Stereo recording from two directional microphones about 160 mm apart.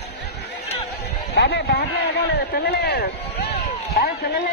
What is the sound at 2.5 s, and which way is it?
Speech, 75° left (ahead or behind).